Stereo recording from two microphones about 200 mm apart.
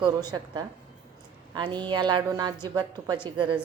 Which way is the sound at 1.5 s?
20° right (ahead or behind).